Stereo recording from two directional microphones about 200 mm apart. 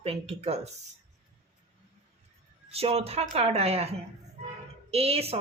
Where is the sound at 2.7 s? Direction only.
30° right (ahead or behind).